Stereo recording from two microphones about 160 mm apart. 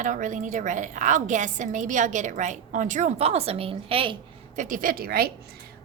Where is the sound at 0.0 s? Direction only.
55° right (ahead or behind); by 4.2 s 35° right (ahead or behind).